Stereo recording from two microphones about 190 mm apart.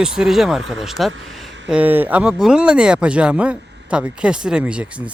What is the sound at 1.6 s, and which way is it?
Speech, 5° right (ahead or behind).